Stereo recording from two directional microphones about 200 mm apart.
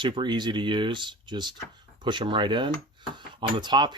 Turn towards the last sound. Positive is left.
turn(degrees=-20)  # may be behind; listen again after turning